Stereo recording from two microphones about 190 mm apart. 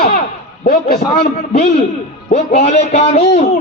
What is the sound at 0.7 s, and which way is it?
Speech, 55° left (ahead or behind).